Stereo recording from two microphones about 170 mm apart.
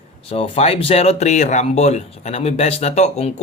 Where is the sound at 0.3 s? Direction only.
35° left (ahead or behind).